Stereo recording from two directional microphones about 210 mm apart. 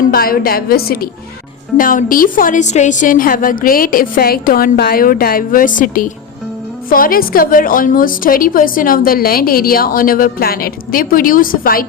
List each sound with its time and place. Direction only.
0.1 s a woman's voice: 45° left (ahead or behind)